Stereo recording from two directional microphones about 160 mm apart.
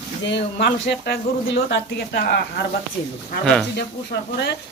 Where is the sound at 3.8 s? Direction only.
90° left.